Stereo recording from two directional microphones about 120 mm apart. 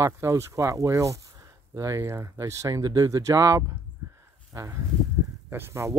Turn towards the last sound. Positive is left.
turn(degrees=-20)  # may be behind; listen again after turning